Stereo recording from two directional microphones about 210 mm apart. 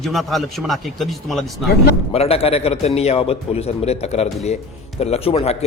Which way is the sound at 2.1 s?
30° left (ahead or behind).